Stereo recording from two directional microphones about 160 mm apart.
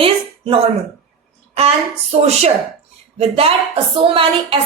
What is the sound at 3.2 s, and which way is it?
A woman's voice, 35° right (ahead or behind).